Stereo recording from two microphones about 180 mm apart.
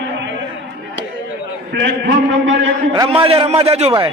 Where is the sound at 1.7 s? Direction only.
75° right (ahead or behind).